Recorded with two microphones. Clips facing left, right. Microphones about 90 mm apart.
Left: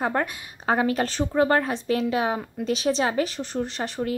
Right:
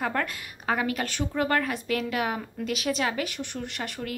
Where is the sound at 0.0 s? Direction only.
25° left (ahead or behind).